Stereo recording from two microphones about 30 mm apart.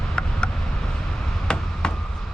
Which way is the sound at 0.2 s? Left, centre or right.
Left.